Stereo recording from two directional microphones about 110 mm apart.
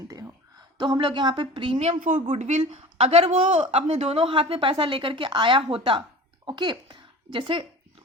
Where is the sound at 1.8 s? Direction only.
80° right.